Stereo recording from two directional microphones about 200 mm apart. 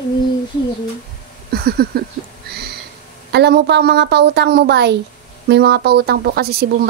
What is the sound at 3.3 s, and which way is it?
A woman's voice, 55° right (ahead or behind).